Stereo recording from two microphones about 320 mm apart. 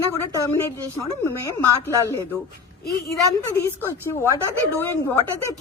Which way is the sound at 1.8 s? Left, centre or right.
Centre.